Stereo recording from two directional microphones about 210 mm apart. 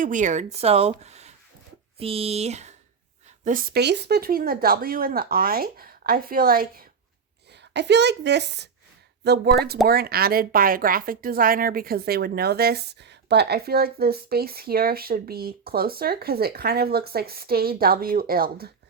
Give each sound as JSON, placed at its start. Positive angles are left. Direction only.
{"t": 0.0, "sound": "speech", "side_deg": -35}
{"t": 3.4, "sound": "speech", "side_deg": -45}
{"t": 7.5, "sound": "a woman's voice", "side_deg": -55}